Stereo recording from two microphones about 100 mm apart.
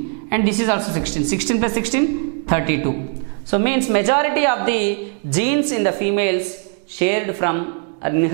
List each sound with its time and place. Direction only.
0.3 s a woman's voice: 10° right (ahead or behind)